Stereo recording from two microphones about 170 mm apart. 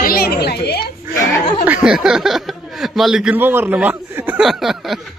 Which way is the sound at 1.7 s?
5° right (ahead or behind).